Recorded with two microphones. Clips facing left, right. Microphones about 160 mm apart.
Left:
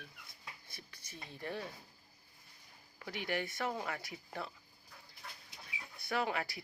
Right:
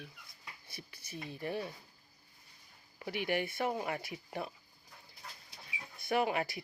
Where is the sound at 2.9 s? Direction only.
15° right (ahead or behind).